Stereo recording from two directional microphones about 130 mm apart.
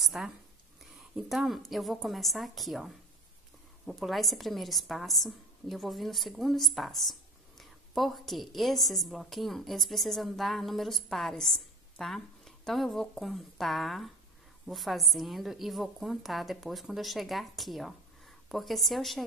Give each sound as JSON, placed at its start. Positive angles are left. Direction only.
{"t": 0.0, "sound": "a woman's voice", "side_deg": 0}